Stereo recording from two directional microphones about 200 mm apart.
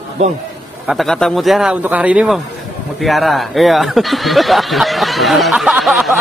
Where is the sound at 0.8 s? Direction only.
Centre (ahead or behind).